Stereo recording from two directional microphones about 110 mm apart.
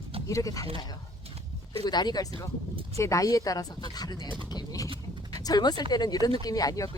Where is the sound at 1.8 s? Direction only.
40° left (ahead or behind).